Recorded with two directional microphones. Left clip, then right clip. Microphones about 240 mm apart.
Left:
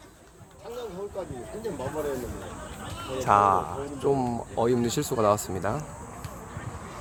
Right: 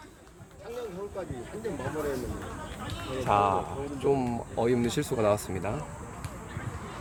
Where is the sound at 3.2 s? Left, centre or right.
Left.